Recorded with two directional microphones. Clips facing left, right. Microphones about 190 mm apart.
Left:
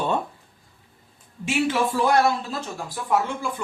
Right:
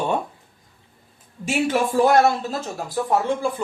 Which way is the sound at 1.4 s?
45° right (ahead or behind).